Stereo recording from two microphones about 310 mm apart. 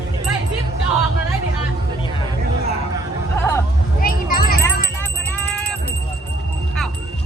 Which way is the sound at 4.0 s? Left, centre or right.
Left.